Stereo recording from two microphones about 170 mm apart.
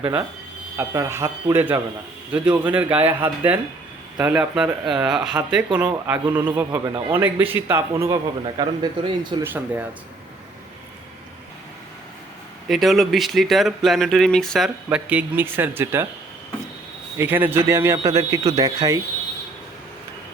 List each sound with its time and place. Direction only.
0.8 s a man's voice: 15° right (ahead or behind)
9.4 s a man's voice: 10° right (ahead or behind)
12.6 s speech: centre (ahead or behind)
14.8 s a man's voice: 10° right (ahead or behind)
17.2 s a man's voice: 10° right (ahead or behind)